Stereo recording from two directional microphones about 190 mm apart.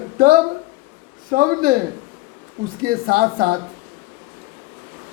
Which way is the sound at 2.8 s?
50° right (ahead or behind).